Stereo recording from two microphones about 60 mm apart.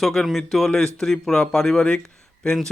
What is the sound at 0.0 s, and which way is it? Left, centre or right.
A man's voice, centre.